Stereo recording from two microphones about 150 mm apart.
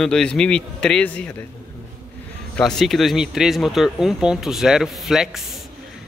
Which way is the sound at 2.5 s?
5° left (ahead or behind).